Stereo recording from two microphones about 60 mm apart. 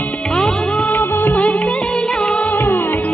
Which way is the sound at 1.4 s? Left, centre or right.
Centre.